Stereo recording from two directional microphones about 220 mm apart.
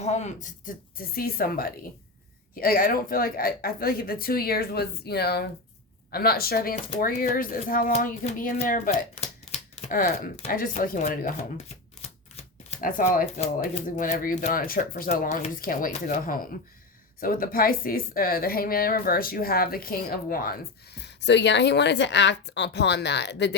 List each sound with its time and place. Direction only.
0.0 s a woman's voice: 30° left (ahead or behind); by 23.6 s 50° left (ahead or behind)